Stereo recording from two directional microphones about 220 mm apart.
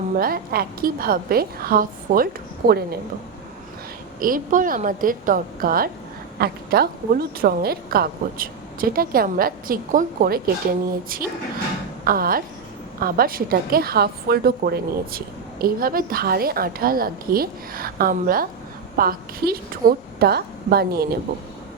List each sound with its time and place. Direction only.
0.2 s a woman's voice: 40° right (ahead or behind)
4.2 s a woman's voice: 40° right (ahead or behind)